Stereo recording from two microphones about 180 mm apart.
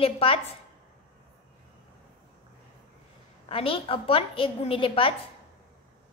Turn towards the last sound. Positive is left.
turn(degrees=30)  # may be behind; listen again after turning